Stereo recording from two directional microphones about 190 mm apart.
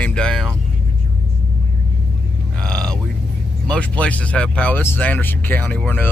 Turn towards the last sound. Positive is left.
turn(degrees=10)  # may be behind; listen again after turning